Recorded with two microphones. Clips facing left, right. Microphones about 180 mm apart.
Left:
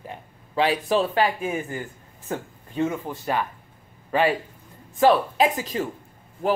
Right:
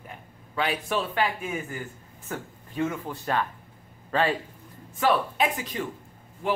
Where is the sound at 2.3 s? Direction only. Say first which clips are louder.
Left 5 dB; 20° left (ahead or behind).